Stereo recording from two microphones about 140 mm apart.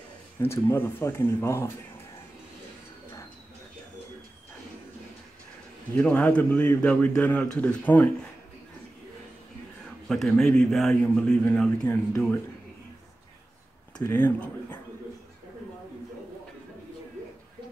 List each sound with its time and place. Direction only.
0.4 s a man's voice: 15° left (ahead or behind)
5.9 s a man's voice: 10° left (ahead or behind)
10.0 s a man's voice: centre (ahead or behind)
13.9 s speech: 10° left (ahead or behind)